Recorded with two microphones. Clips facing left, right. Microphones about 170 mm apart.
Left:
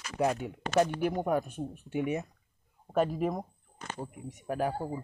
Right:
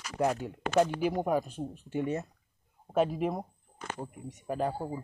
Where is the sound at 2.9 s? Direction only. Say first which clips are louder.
Even; 5° right (ahead or behind).